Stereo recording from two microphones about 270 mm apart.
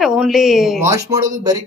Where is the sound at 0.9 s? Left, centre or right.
Centre.